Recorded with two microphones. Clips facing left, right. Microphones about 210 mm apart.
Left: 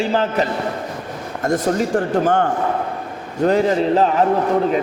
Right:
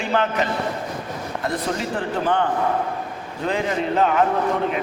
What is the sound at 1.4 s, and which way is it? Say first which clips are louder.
A man's voice: left 8 dB; 45° left (ahead or behind).